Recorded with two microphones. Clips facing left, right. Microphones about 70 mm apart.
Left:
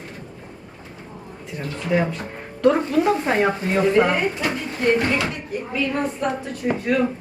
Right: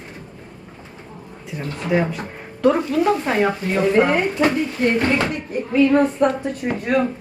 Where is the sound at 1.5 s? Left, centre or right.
Centre.